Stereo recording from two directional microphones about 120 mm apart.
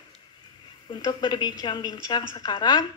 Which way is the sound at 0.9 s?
35° left (ahead or behind).